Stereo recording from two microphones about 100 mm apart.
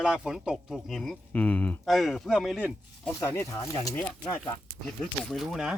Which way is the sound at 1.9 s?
Centre (ahead or behind).